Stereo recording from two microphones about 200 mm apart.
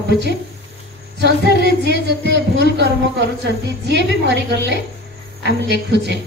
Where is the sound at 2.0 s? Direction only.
60° right (ahead or behind).